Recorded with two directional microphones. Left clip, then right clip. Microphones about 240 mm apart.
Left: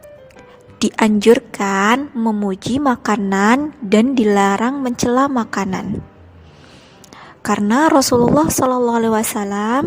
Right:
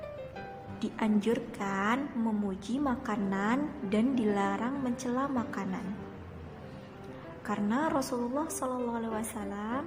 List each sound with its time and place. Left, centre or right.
0.8 s a woman's voice: left
7.4 s a woman's voice: left